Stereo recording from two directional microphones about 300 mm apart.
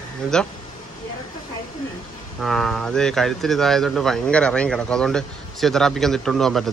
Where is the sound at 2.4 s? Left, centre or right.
Centre.